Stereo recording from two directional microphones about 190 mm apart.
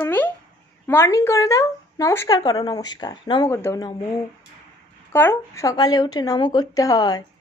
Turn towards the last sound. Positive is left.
turn(degrees=20)  # may be behind; listen again after turning